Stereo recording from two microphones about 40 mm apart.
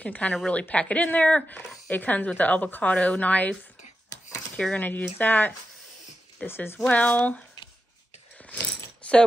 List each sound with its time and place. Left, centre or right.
0.0 s speech: left
4.7 s speech: left
6.4 s speech: left
6.8 s speech: left
8.5 s a sound: left